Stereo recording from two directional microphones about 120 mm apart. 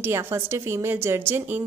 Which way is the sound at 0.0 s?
20° right (ahead or behind).